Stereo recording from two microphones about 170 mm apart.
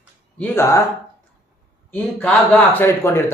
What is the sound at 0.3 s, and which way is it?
Speech, 10° left (ahead or behind).